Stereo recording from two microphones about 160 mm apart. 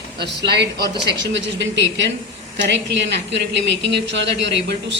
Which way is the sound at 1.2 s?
90° right.